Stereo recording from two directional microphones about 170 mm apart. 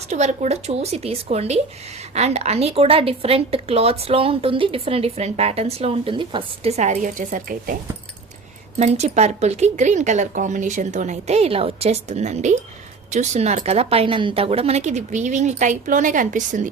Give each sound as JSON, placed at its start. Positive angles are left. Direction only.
{"t": 0.1, "sound": "a woman's voice", "side_deg": -40}
{"t": 8.8, "sound": "a woman's voice", "side_deg": -40}